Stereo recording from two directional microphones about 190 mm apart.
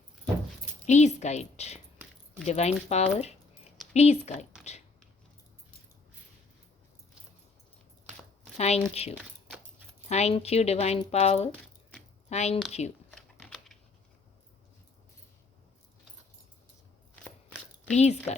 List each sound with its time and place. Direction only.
0.9 s speech: 35° left (ahead or behind)
8.5 s speech: 35° left (ahead or behind)
13.1 s typing: 5° left (ahead or behind)
17.9 s speech: 35° left (ahead or behind)